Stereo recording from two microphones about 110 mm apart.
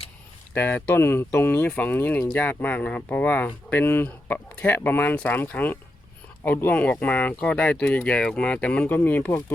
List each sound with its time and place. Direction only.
0.5 s speech: 20° left (ahead or behind)